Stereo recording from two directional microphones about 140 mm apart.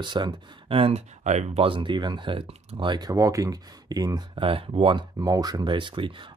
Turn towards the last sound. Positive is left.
turn(degrees=-35)  # may be behind; listen again after turning